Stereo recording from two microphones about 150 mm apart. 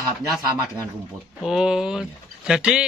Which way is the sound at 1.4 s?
5° right (ahead or behind).